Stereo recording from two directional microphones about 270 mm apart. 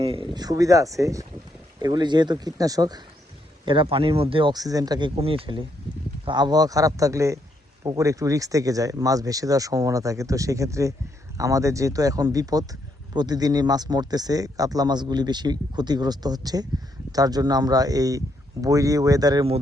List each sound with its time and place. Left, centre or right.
0.0 s speech: centre